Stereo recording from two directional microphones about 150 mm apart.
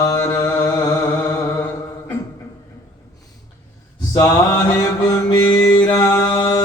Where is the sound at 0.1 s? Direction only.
20° left (ahead or behind).